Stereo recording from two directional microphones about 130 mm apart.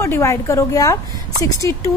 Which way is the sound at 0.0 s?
20° left (ahead or behind).